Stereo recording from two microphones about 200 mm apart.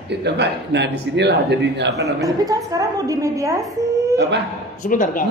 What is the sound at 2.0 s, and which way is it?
A woman's voice, 15° right (ahead or behind).